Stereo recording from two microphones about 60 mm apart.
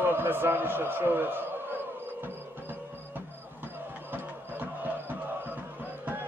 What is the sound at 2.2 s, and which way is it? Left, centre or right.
Music, right.